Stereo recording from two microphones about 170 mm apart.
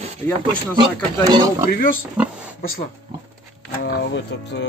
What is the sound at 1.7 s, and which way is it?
Speech, 55° left (ahead or behind).